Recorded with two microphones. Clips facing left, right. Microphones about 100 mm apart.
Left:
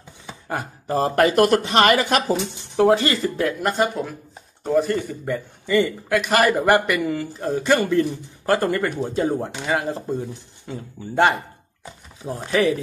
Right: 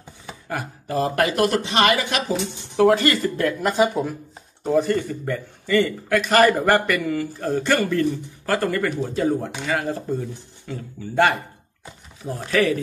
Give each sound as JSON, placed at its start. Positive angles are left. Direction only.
{"t": 0.5, "sound": "speech", "side_deg": 30}
{"t": 2.8, "sound": "speech", "side_deg": 25}
{"t": 3.6, "sound": "speech", "side_deg": 0}
{"t": 4.9, "sound": "a man's voice", "side_deg": 15}